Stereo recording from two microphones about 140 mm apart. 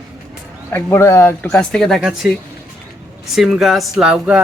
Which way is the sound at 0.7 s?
15° left (ahead or behind).